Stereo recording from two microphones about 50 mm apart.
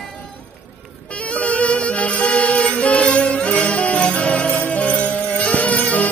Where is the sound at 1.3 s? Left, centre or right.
Left.